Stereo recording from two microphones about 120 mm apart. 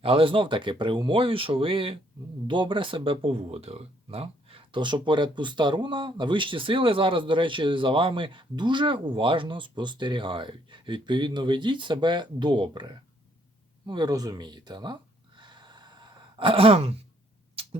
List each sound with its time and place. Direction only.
0.0 s speech: 50° right (ahead or behind)
15.4 s sigh: 40° right (ahead or behind)
17.5 s a sound: 50° right (ahead or behind)